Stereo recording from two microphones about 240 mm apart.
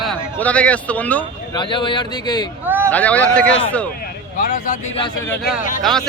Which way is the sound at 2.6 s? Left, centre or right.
Centre.